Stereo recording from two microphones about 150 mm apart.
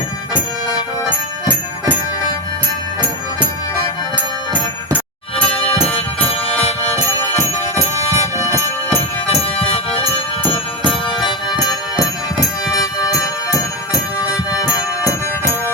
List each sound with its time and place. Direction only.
5.5 s music: 40° left (ahead or behind)
11.3 s music: 30° left (ahead or behind)